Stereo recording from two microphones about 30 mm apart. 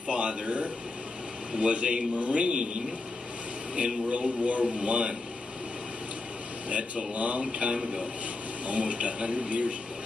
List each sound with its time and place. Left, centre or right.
0.1 s a man's voice: right
4.7 s a man's voice: right
7.2 s a man's voice: right
7.7 s a man's voice: right
8.6 s a man's voice: right